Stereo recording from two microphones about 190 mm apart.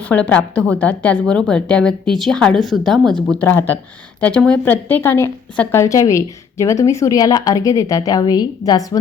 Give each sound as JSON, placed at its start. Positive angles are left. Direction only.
{"t": 0.0, "sound": "a woman's voice", "side_deg": 10}